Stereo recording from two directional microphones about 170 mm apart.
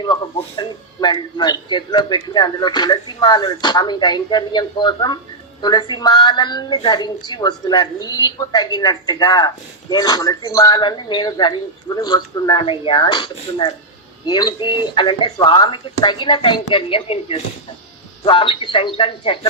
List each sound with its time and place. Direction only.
0.0 s speech: 30° left (ahead or behind)